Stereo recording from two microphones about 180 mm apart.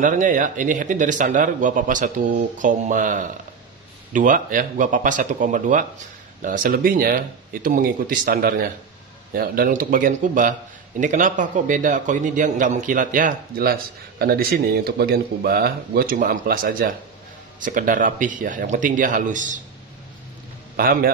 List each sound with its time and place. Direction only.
0.0 s a man's voice: 45° right (ahead or behind)
20.7 s a man's voice: 55° right (ahead or behind)